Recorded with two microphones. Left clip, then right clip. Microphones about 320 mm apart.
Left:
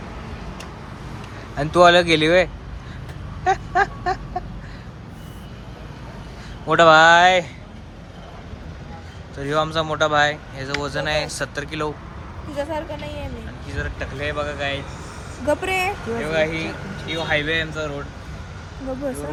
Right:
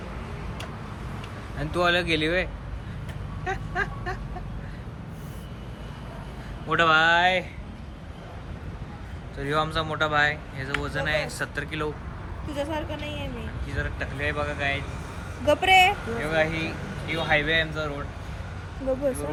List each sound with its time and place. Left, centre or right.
1.5 s speech: centre
3.4 s a sound: centre
6.7 s speech: centre
9.4 s speech: centre